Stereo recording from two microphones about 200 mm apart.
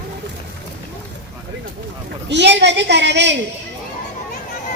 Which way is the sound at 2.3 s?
60° right (ahead or behind).